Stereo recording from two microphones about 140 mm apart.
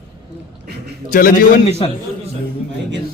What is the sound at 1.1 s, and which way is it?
Speech, 80° left.